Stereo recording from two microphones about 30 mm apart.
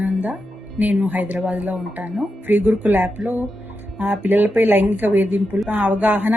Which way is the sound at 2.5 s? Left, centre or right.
Right.